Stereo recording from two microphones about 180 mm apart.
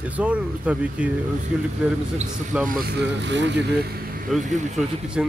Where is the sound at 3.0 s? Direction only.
80° right.